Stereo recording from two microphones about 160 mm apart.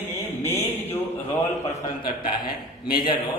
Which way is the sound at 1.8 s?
30° left (ahead or behind).